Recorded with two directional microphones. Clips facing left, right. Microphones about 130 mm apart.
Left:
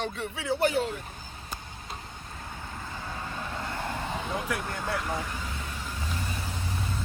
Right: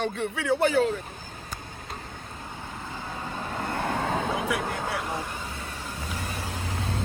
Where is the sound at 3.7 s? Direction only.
60° right (ahead or behind).